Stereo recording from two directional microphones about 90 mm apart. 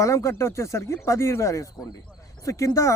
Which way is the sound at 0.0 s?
35° left (ahead or behind).